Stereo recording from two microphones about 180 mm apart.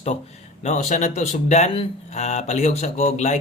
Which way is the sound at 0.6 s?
40° left (ahead or behind).